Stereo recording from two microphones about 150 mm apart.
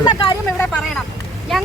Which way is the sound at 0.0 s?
30° left (ahead or behind).